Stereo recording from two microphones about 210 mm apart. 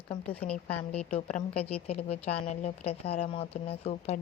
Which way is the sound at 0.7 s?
5° left (ahead or behind).